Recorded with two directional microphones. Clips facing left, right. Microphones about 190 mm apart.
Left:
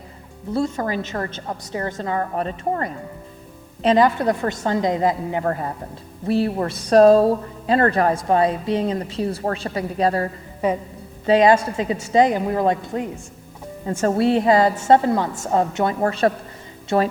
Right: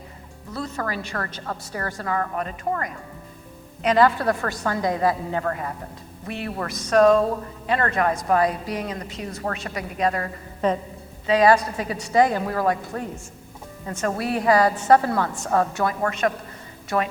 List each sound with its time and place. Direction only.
0.5 s a woman's voice: 25° left (ahead or behind)
3.8 s a woman's voice: 20° left (ahead or behind)
5.5 s speech: 35° left (ahead or behind)
10.6 s a woman's voice: 10° left (ahead or behind)
11.3 s a woman's voice: 25° left (ahead or behind)